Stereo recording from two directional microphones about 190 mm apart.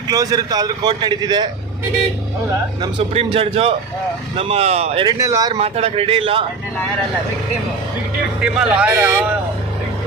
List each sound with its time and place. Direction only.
0.1 s a man's voice: 20° right (ahead or behind)
2.8 s a man's voice: 30° right (ahead or behind)
5.0 s speech: 15° right (ahead or behind)
5.5 s a man's voice: 30° right (ahead or behind)
8.4 s speech: 5° right (ahead or behind)